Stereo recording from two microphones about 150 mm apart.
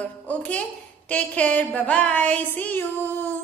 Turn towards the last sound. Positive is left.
turn(degrees=15)  # may be behind; listen again after turning